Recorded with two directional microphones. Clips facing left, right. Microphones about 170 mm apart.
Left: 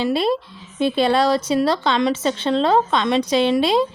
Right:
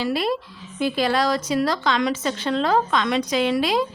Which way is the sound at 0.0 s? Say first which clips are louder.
Left 4 dB; 25° left (ahead or behind).